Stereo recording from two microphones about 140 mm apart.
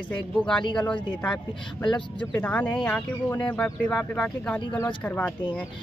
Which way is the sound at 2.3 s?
10° left (ahead or behind).